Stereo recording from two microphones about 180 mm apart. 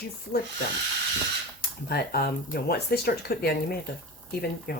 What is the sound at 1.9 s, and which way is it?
Speech, 60° left (ahead or behind).